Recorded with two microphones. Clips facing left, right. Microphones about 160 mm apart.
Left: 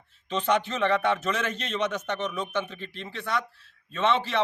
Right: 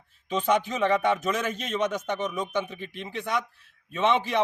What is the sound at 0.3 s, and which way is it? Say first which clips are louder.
A man's voice: right 1 dB; 10° right (ahead or behind).